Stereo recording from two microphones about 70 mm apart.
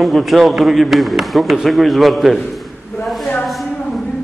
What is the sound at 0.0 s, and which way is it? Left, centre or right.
A man's voice, centre.